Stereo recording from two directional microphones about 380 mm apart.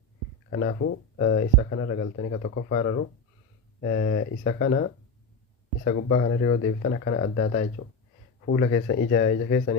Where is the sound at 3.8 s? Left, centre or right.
Left.